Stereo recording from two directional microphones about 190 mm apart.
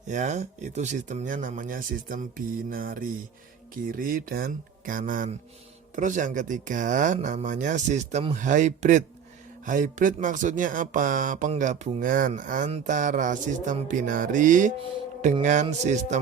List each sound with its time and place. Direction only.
0.1 s speech: 40° right (ahead or behind)